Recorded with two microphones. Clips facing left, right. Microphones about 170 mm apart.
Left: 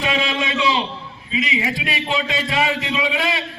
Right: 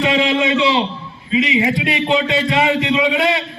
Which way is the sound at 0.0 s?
25° right (ahead or behind).